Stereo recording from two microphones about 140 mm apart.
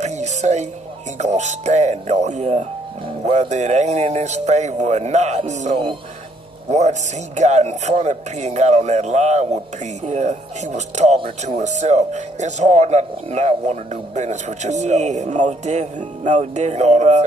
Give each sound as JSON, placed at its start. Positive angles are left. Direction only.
{"t": 0.0, "sound": "music", "side_deg": -55}
{"t": 1.1, "sound": "speech", "side_deg": -55}